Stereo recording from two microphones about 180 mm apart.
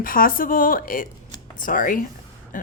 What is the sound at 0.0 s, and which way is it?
A woman's voice, 50° left (ahead or behind).